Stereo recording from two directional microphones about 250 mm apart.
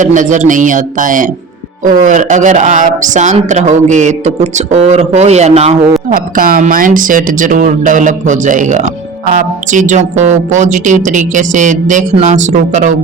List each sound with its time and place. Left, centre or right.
0.0 s speech: right